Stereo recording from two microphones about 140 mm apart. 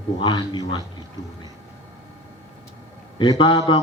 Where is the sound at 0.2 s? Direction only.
30° left (ahead or behind).